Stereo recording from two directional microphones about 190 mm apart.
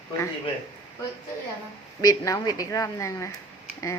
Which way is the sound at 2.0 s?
15° left (ahead or behind).